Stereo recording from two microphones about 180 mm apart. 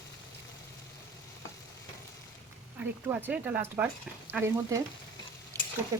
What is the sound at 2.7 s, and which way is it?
Speech, 10° right (ahead or behind).